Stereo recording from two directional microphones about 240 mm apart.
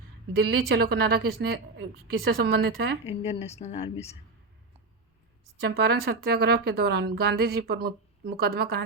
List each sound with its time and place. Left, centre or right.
0.4 s a woman's voice: right
3.1 s speech: left
5.6 s a woman's voice: right